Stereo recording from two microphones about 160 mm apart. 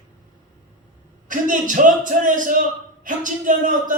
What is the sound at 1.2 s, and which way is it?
A man's voice, 55° right (ahead or behind).